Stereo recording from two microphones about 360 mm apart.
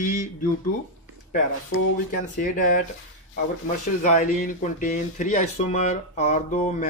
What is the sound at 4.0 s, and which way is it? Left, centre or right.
Speech, left.